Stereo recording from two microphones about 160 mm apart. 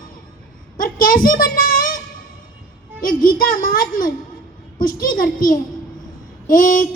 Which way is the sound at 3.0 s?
60° left (ahead or behind).